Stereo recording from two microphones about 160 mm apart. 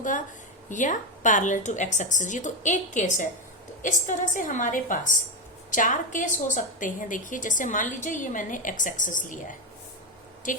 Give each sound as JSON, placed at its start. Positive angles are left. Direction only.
{"t": 0.7, "sound": "a woman's voice", "side_deg": 50}